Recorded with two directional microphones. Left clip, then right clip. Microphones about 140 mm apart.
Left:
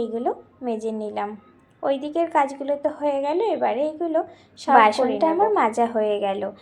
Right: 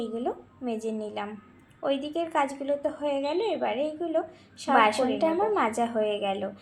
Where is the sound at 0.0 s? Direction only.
25° left (ahead or behind).